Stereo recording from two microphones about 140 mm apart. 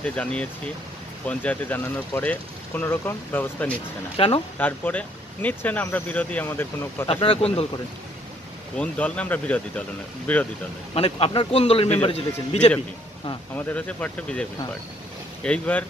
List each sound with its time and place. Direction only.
0.0 s speech: 10° left (ahead or behind)
4.2 s speech: 40° left (ahead or behind)
4.6 s speech: 10° left (ahead or behind)
7.1 s speech: 40° left (ahead or behind)
8.7 s speech: 10° left (ahead or behind)
11.0 s speech: 40° left (ahead or behind)
13.7 s speech: 10° left (ahead or behind)